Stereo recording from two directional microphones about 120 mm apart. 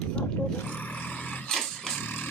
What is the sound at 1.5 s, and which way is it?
Dog, 5° left (ahead or behind).